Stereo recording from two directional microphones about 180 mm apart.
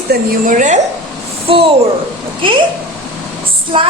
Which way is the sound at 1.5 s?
30° right (ahead or behind).